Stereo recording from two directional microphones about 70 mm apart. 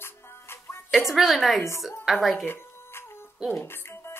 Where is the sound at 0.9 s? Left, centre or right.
Centre.